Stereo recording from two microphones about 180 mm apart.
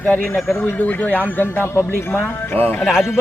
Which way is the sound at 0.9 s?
10° left (ahead or behind).